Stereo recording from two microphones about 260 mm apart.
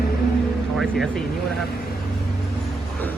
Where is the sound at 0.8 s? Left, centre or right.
Centre.